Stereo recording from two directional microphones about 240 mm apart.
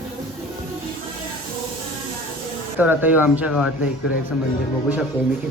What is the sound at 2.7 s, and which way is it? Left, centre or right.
Speech, centre.